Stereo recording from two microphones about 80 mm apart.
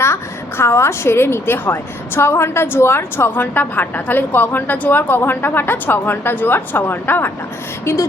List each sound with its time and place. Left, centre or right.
0.0 s a woman's voice: left